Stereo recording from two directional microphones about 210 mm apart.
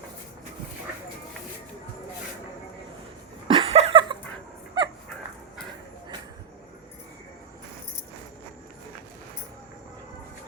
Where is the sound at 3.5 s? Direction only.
25° right (ahead or behind).